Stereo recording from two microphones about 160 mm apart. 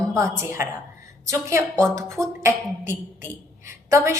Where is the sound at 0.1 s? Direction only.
15° right (ahead or behind).